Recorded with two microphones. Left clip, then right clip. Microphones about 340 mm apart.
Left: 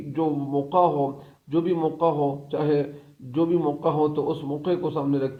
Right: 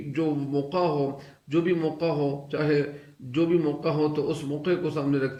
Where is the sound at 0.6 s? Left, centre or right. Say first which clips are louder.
Left 6 dB; centre.